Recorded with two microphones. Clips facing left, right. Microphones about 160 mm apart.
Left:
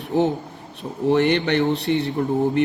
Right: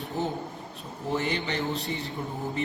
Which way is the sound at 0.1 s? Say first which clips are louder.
Left 11 dB; 75° left (ahead or behind).